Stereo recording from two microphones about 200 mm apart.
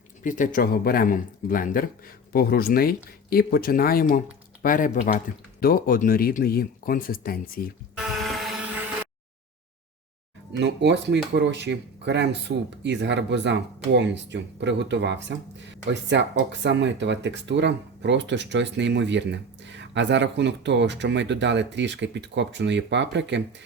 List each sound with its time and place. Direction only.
0.2 s speech: 40° left (ahead or behind)
8.3 s motorboat: centre (ahead or behind)
10.6 s speech: 60° right (ahead or behind)